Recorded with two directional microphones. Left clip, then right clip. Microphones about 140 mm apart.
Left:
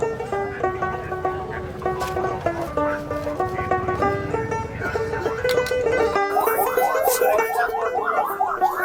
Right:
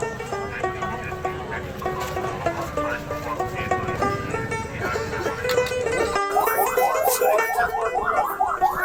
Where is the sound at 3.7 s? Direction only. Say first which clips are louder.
Left 2 dB; 15° right (ahead or behind).